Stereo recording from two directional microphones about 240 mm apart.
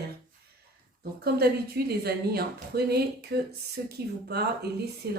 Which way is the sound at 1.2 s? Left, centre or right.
Right.